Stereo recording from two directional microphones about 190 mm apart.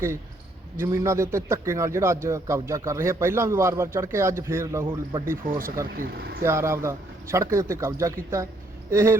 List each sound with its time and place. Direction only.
0.8 s a man's voice: 15° right (ahead or behind)
5.5 s speech: 50° right (ahead or behind)
6.4 s a man's voice: 15° right (ahead or behind)